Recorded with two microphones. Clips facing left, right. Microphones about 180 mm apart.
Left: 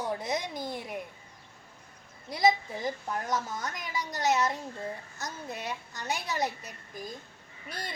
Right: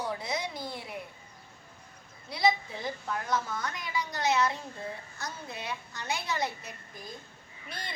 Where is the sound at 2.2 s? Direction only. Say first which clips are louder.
Left 2 dB; 45° left (ahead or behind).